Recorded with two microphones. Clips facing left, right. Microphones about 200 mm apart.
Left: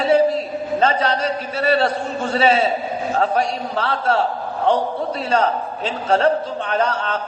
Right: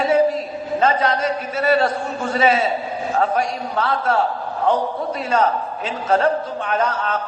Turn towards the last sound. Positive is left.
turn(degrees=35)  # may be behind; listen again after turning